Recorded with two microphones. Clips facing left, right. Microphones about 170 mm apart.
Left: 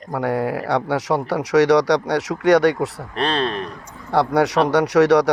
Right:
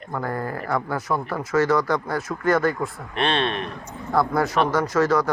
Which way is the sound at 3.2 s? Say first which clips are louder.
Left 2 dB; 35° left (ahead or behind).